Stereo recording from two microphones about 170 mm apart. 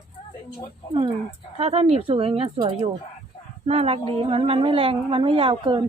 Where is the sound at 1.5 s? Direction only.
35° right (ahead or behind).